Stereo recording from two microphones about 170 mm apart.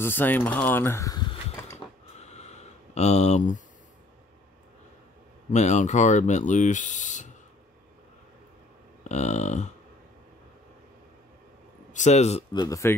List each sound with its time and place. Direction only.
0.0 s speech: 10° left (ahead or behind)
2.1 s a sound: 40° left (ahead or behind)
5.5 s speech: 45° left (ahead or behind)
9.0 s speech: 40° left (ahead or behind)
11.9 s speech: 45° left (ahead or behind)
12.5 s speech: 20° left (ahead or behind)